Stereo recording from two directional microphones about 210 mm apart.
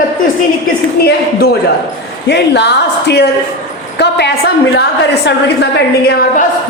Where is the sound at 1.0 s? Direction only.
50° left (ahead or behind).